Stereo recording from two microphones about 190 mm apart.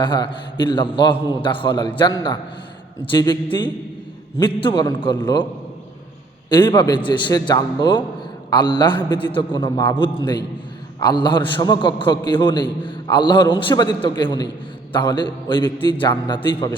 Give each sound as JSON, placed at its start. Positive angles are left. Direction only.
{"t": 0.0, "sound": "a man's voice", "side_deg": 25}
{"t": 6.5, "sound": "a man's voice", "side_deg": 25}
{"t": 11.0, "sound": "a man's voice", "side_deg": 25}